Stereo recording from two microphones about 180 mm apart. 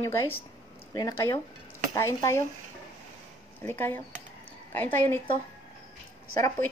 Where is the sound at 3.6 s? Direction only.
10° left (ahead or behind).